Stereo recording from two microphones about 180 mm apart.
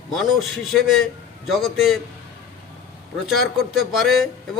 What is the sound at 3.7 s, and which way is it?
Speech, centre (ahead or behind).